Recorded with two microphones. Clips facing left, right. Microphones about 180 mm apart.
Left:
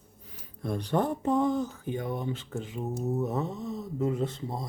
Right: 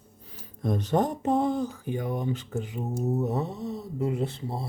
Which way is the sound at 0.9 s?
35° right (ahead or behind).